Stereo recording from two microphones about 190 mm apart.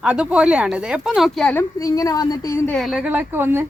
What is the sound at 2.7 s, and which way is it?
Speech, centre (ahead or behind).